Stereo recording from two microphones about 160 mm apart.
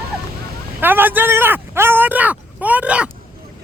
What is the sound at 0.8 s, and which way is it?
Speech, 10° right (ahead or behind).